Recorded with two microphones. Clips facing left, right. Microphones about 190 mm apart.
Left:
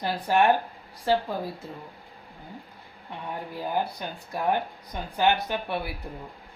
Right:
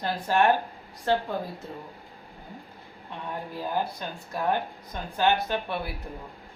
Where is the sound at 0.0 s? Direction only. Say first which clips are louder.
Left 1 dB; 15° left (ahead or behind).